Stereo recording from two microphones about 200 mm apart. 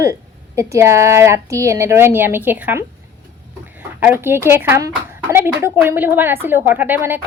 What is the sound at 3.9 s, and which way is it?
Speech, 10° right (ahead or behind).